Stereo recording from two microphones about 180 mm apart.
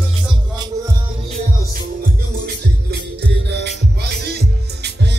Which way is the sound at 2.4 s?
65° right (ahead or behind).